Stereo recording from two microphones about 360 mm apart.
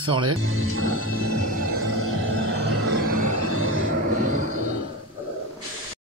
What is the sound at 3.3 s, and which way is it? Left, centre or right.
Train, right.